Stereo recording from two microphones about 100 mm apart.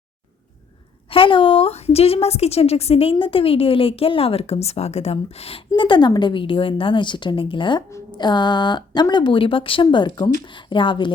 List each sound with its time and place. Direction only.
1.1 s a woman's voice: 60° left (ahead or behind)